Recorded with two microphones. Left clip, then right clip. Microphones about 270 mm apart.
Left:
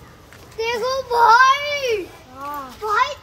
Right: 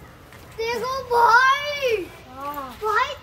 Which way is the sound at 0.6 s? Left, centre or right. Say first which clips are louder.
Left 4 dB; centre.